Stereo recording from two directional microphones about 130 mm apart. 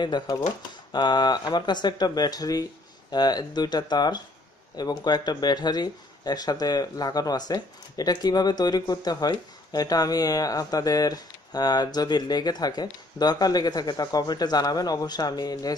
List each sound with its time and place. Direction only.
0.0 s speech: 35° left (ahead or behind)